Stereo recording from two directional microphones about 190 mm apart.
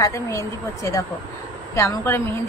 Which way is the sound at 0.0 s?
15° left (ahead or behind).